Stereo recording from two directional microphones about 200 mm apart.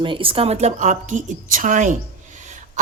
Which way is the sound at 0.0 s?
25° right (ahead or behind).